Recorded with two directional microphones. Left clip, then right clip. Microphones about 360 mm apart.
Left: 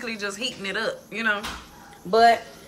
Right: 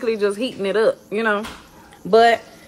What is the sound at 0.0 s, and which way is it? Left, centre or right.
A woman's voice, centre.